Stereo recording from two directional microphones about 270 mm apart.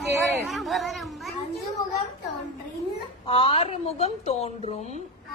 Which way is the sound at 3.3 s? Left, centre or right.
Centre.